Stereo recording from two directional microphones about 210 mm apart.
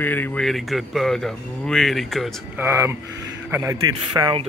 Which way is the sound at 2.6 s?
10° right (ahead or behind).